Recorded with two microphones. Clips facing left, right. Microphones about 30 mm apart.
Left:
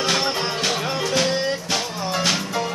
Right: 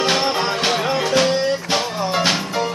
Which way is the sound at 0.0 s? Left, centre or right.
Centre.